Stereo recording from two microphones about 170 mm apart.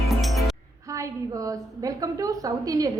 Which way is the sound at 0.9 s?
20° right (ahead or behind).